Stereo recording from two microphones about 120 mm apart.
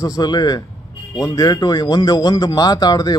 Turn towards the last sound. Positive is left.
turn(degrees=30)  # may be behind; listen again after turning